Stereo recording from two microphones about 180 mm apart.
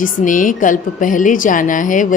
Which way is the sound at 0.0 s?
45° left (ahead or behind).